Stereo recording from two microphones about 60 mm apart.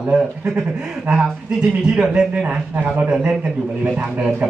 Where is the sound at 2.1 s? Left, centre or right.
Centre.